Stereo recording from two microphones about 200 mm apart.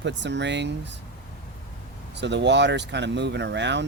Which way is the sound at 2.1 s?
60° right (ahead or behind).